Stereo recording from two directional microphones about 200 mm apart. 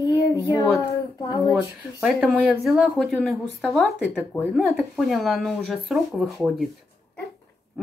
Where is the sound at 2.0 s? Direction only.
5° right (ahead or behind).